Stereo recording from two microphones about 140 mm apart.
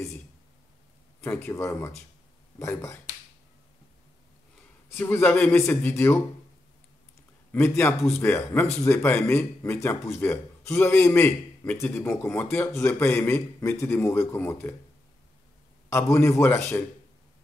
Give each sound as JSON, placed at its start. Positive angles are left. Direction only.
{"t": 1.2, "sound": "speech", "side_deg": 15}
{"t": 4.8, "sound": "speech", "side_deg": 15}
{"t": 7.5, "sound": "speech", "side_deg": 15}
{"t": 15.9, "sound": "speech", "side_deg": 20}